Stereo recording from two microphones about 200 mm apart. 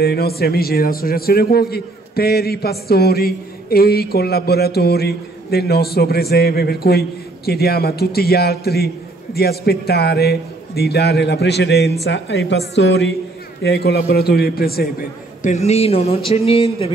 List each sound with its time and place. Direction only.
0.0 s a man's voice: 50° left (ahead or behind); by 16.9 s 30° left (ahead or behind)